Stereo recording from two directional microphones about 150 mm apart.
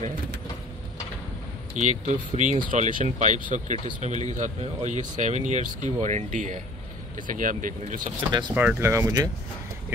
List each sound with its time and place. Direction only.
1.8 s speech: 55° right (ahead or behind)
8.3 s speech: 30° right (ahead or behind)
8.5 s speech: 15° right (ahead or behind)